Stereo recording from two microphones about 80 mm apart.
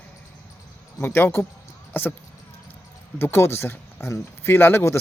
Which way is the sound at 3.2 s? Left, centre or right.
Left.